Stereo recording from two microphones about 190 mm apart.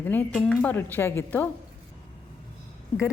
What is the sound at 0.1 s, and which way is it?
A woman's voice, 5° left (ahead or behind).